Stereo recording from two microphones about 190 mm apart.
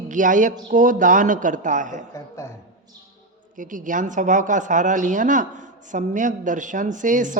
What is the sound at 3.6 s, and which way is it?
A woman's voice, 45° right (ahead or behind).